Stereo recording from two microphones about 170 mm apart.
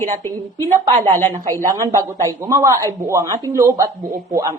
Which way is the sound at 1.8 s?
20° right (ahead or behind).